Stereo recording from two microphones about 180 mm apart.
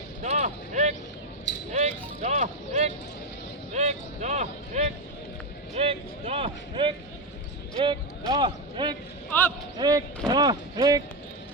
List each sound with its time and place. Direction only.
0.2 s a sound: 40° right (ahead or behind)
1.7 s vehicle: 35° right (ahead or behind)
3.7 s speech: 40° right (ahead or behind); by 11.0 s 20° right (ahead or behind)